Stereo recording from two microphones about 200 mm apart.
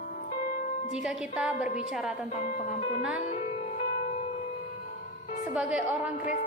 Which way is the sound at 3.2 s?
35° left (ahead or behind).